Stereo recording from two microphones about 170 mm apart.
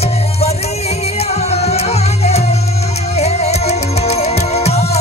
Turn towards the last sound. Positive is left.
turn(degrees=40)  # may be behind; listen again after turning